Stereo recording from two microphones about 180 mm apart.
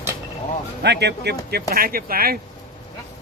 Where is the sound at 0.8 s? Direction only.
70° right (ahead or behind).